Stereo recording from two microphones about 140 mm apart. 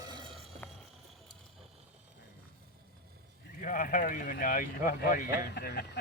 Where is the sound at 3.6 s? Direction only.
75° left (ahead or behind).